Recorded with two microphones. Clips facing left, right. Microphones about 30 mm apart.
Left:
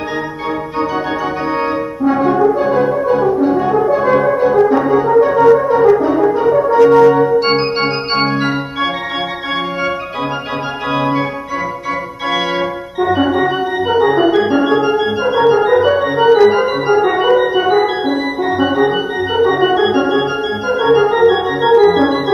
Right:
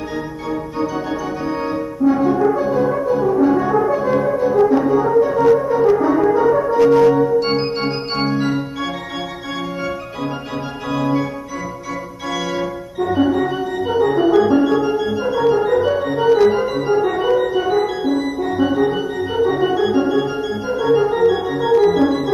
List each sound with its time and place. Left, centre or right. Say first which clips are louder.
1.6 s french horn: left 3 dB; left
3.3 s french horn: left 2 dB; left
3.9 s french horn: left 5 dB; left
6.7 s organ: left 5 dB; left
10.9 s organ: left 3 dB; left
12.3 s organ: left 5 dB; left
16.4 s music: left 4 dB; left